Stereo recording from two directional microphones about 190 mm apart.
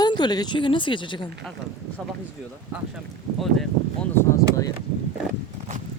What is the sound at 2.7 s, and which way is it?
Speech, 10° right (ahead or behind).